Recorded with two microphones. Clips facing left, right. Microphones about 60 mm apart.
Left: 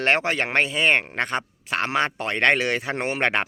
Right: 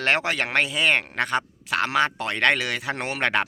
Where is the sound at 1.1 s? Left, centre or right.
Left.